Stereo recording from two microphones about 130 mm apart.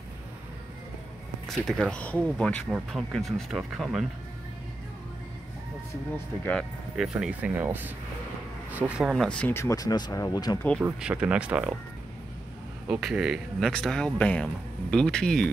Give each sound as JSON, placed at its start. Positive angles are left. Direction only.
{"t": 1.5, "sound": "speech", "side_deg": 0}
{"t": 7.0, "sound": "speech", "side_deg": -5}
{"t": 9.5, "sound": "speech", "side_deg": 20}
{"t": 10.8, "sound": "speech", "side_deg": -10}
{"t": 13.0, "sound": "speech", "side_deg": -5}